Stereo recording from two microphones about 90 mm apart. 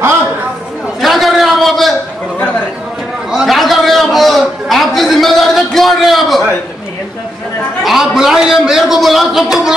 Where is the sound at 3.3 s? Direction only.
Centre (ahead or behind).